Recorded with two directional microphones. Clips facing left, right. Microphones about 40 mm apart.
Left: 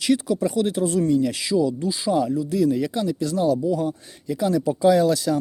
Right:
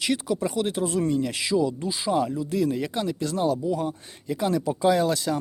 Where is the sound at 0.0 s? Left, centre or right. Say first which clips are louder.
Left 4 dB; right.